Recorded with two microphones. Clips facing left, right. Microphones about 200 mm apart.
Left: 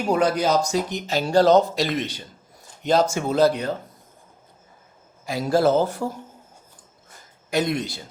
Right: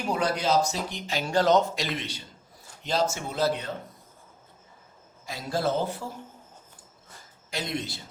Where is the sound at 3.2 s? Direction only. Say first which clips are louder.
Left 11 dB; 75° left (ahead or behind).